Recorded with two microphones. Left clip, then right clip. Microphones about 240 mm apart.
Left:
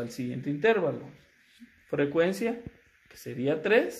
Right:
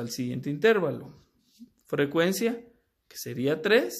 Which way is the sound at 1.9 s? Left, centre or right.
Right.